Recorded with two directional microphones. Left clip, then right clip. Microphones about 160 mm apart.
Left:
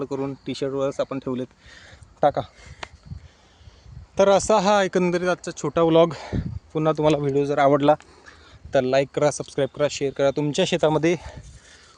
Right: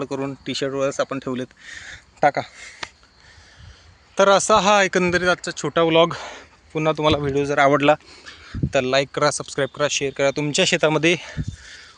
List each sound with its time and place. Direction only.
0.0 s speech: centre (ahead or behind)
4.1 s speech: 10° left (ahead or behind)
5.1 s speech: 5° right (ahead or behind)
6.1 s speech: 10° left (ahead or behind)
7.2 s speech: 5° left (ahead or behind)
7.9 s a sound: centre (ahead or behind)
8.7 s speech: 15° left (ahead or behind)